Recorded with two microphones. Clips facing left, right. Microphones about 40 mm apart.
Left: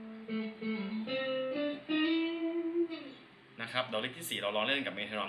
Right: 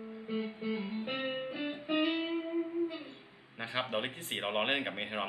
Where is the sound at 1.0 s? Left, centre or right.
Right.